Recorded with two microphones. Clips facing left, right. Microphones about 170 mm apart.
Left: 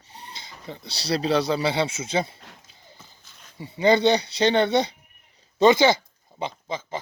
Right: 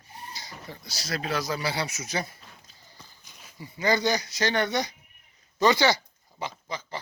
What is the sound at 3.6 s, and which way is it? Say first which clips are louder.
Speech: left 7 dB; 25° left (ahead or behind).